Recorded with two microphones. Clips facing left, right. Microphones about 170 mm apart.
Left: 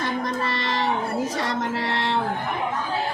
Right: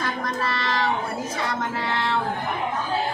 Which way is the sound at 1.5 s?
75° left (ahead or behind).